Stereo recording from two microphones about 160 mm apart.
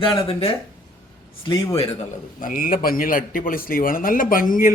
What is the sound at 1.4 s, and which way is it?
Speech, 20° left (ahead or behind).